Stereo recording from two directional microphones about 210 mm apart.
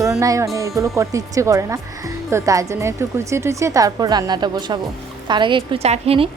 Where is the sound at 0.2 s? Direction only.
15° right (ahead or behind).